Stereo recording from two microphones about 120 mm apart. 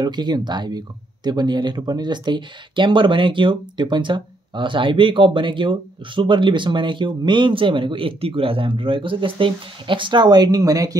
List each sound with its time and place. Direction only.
0.0 s speech: 35° right (ahead or behind)